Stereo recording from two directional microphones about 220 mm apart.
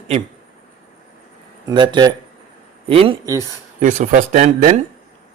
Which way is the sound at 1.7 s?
20° right (ahead or behind).